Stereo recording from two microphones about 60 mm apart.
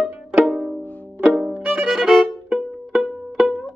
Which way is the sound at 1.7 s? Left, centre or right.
Centre.